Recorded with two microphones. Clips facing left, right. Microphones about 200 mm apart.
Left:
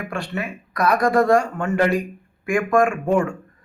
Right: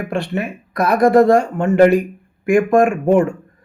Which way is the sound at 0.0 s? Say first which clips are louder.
Right 6 dB; 20° right (ahead or behind).